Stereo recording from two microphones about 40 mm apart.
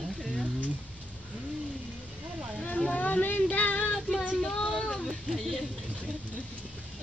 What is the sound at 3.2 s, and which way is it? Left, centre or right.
Music, left.